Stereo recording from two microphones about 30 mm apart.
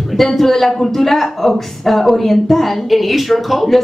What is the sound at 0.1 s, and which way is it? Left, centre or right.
Speech, centre.